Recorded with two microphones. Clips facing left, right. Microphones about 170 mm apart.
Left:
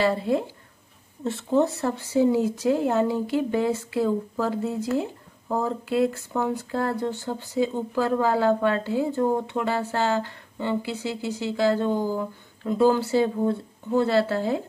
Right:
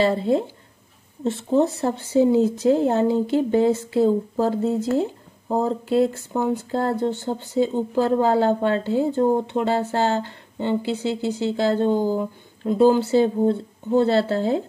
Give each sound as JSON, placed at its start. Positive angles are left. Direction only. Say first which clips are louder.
{"t": 0.0, "sound": "speech", "louder": "right 3 dB", "side_deg": -25}